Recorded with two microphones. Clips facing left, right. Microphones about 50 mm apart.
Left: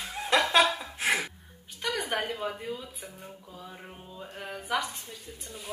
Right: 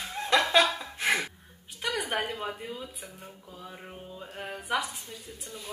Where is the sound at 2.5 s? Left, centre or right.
Centre.